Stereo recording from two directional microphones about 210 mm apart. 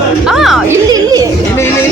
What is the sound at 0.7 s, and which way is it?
Speech, 15° right (ahead or behind).